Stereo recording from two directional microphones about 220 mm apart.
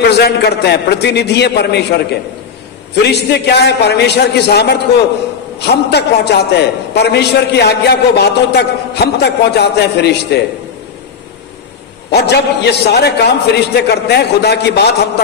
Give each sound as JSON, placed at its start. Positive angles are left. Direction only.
{"t": 0.0, "sound": "a man's voice", "side_deg": 45}
{"t": 12.1, "sound": "a man's voice", "side_deg": 50}